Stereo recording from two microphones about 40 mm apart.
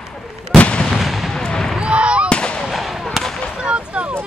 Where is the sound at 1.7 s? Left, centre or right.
Right.